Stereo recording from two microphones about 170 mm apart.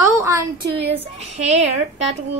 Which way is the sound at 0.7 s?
35° right (ahead or behind).